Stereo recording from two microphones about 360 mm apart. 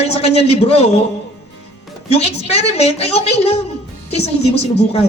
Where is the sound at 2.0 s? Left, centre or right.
Centre.